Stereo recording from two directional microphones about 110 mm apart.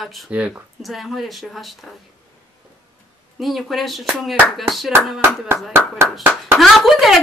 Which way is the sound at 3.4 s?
Centre (ahead or behind).